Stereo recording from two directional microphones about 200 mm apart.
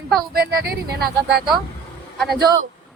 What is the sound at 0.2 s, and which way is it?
Speech, 50° right (ahead or behind).